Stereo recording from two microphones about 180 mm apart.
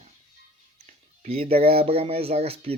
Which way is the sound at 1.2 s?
35° right (ahead or behind).